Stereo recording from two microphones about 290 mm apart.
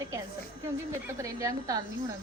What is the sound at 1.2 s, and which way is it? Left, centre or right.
Speech, centre.